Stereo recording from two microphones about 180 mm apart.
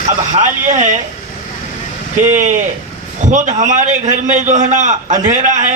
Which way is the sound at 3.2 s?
45° right (ahead or behind).